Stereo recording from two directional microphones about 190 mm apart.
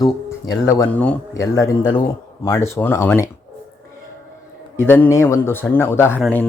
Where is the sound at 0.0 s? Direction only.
20° left (ahead or behind).